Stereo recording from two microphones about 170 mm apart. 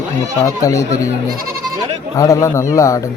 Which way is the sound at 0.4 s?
20° left (ahead or behind).